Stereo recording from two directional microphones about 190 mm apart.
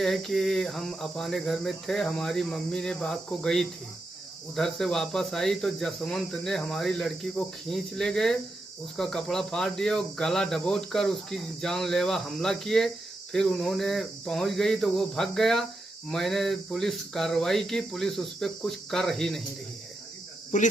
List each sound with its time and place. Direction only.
0.0 s cricket: centre (ahead or behind)